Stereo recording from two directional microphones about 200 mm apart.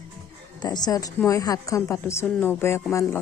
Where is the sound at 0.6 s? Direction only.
20° left (ahead or behind).